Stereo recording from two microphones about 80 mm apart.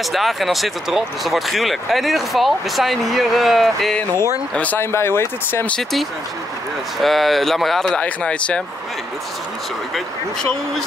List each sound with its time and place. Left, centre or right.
0.1 s speech: centre
4.7 s speech: left
5.7 s speech: centre
8.0 s speech: centre